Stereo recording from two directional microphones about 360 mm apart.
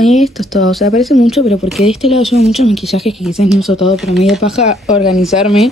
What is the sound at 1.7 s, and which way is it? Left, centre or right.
A woman's voice, centre.